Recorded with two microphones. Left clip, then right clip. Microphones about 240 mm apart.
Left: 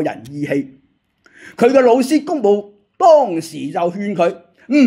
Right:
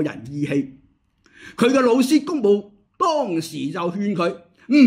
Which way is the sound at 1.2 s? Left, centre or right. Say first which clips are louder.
Left 6 dB; centre.